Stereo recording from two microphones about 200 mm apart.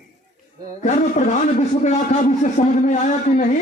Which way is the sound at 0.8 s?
35° left (ahead or behind).